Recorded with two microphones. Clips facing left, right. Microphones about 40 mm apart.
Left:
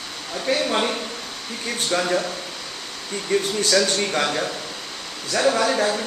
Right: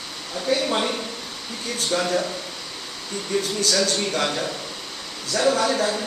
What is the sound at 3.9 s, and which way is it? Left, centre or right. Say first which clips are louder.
Speech: left 1 dB; left.